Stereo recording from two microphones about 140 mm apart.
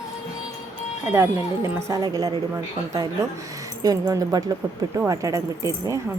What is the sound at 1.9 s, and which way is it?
Speech, 25° right (ahead or behind).